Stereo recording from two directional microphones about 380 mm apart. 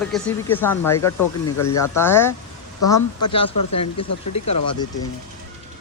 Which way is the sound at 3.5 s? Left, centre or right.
Left.